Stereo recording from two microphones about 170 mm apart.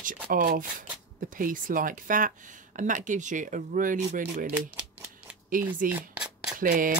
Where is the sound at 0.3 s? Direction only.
55° right (ahead or behind).